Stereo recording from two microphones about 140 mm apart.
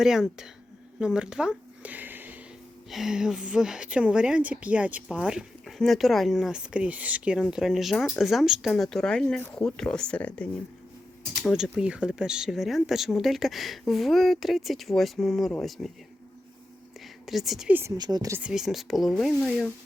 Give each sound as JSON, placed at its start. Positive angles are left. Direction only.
{"t": 0.0, "sound": "speech", "side_deg": -5}
{"t": 0.9, "sound": "a sound", "side_deg": -5}
{"t": 2.9, "sound": "speech", "side_deg": -5}
{"t": 11.4, "sound": "speech", "side_deg": -5}
{"t": 17.2, "sound": "speech", "side_deg": 0}
{"t": 17.9, "sound": "speech", "side_deg": -30}
{"t": 18.3, "sound": "speech", "side_deg": -5}